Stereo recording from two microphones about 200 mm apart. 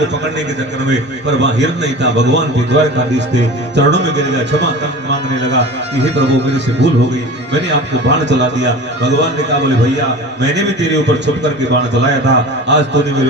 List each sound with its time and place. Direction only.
0.9 s a man's voice: 60° right (ahead or behind)